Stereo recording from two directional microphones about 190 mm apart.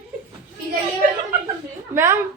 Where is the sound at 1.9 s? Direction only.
15° right (ahead or behind).